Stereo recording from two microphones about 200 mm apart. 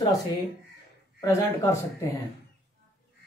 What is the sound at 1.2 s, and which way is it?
Speech, 15° left (ahead or behind).